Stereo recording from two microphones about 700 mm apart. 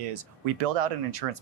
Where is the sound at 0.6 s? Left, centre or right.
Right.